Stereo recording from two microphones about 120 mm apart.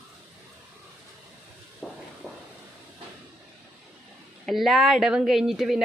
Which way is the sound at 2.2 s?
15° left (ahead or behind).